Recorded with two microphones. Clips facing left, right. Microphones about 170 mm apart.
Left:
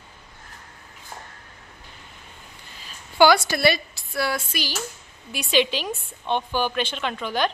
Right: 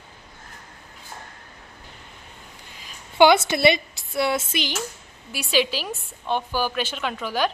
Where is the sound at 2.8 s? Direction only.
20° right (ahead or behind).